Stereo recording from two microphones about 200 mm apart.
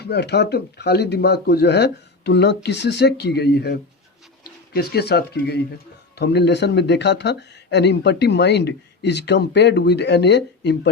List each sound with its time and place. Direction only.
0.0 s speech: 55° left (ahead or behind)